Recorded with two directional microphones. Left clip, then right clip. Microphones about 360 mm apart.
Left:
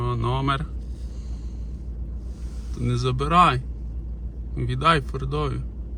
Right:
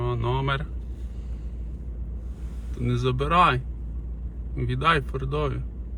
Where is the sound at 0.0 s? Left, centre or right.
Centre.